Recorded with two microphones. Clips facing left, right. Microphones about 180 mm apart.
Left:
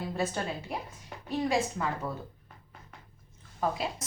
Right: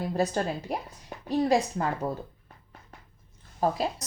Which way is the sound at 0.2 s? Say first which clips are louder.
Right 5 dB; 40° right (ahead or behind).